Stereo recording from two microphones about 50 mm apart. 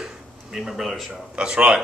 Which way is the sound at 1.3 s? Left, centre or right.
Centre.